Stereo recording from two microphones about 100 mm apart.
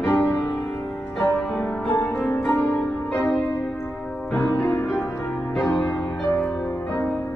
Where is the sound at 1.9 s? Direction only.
20° left (ahead or behind).